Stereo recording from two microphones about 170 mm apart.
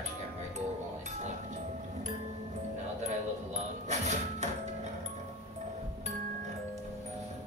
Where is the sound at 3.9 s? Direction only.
40° right (ahead or behind).